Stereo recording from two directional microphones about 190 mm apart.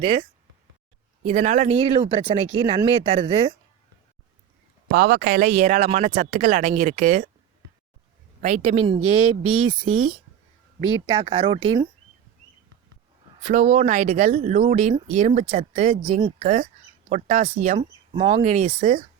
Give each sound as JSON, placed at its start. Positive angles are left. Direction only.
{"t": 0.0, "sound": "speech", "side_deg": -25}
{"t": 1.2, "sound": "speech", "side_deg": -35}
{"t": 4.9, "sound": "speech", "side_deg": -50}
{"t": 8.4, "sound": "speech", "side_deg": -40}
{"t": 13.4, "sound": "speech", "side_deg": -40}
{"t": 17.7, "sound": "speech", "side_deg": -25}
{"t": 18.4, "sound": "speech", "side_deg": -35}